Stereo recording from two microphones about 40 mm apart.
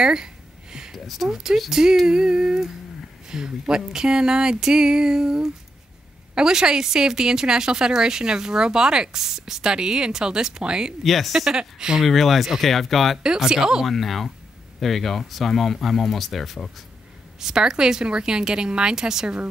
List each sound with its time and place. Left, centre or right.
0.0 s a sound: centre
0.9 s speech: centre
1.3 s a woman's voice: centre
11.1 s speech: centre
11.3 s a woman's voice: centre
12.0 s speech: centre
13.4 s a woman's voice: centre
13.8 s speech: centre
17.4 s a woman's voice: centre